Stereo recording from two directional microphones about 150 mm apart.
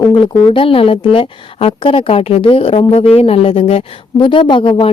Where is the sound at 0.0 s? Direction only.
35° left (ahead or behind).